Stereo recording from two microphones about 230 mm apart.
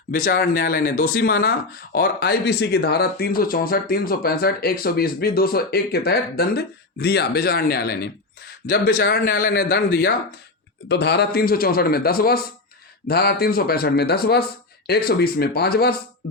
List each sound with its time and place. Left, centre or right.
0.1 s speech: left